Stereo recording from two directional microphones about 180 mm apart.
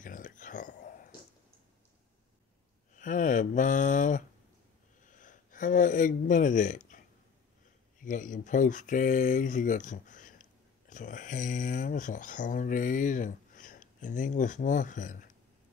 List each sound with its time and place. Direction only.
0.0 s whispering: 45° left (ahead or behind)
3.0 s speech: 45° left (ahead or behind)
5.0 s a sound: 45° left (ahead or behind)
8.0 s speech: 45° left (ahead or behind)